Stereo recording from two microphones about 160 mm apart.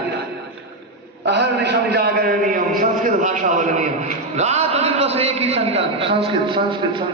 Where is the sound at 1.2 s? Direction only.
90° right; by 3.8 s 50° right (ahead or behind).